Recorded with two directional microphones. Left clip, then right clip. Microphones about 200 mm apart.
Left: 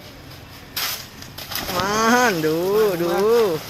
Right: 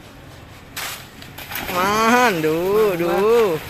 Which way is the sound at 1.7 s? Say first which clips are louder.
Right 2 dB; 5° right (ahead or behind).